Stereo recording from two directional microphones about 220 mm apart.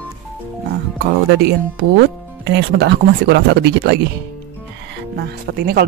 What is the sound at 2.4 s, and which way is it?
Speech, 50° right (ahead or behind).